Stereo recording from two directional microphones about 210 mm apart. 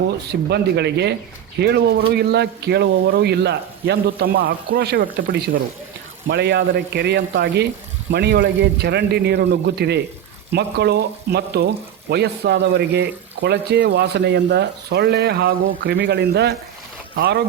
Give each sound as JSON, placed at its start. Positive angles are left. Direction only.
{"t": 0.3, "sound": "speech", "side_deg": -50}